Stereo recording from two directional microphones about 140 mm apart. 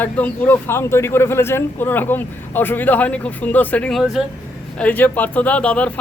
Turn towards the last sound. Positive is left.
turn(degrees=10)  # may be behind; listen again after turning